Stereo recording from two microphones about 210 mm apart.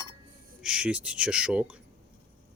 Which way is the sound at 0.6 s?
5° right (ahead or behind).